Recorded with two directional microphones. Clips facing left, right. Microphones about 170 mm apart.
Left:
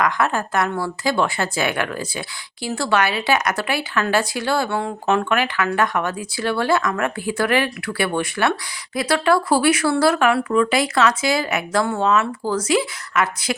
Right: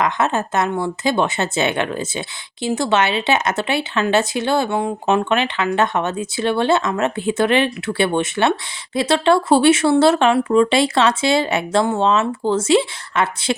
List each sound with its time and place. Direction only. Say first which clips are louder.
0.0 s speech: right 1 dB; 20° right (ahead or behind)